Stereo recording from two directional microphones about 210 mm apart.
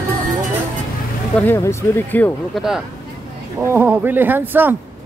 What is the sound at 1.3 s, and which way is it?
Speech, 10° left (ahead or behind).